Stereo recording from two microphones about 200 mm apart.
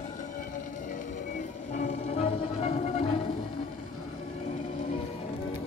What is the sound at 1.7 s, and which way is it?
Music, 35° left (ahead or behind).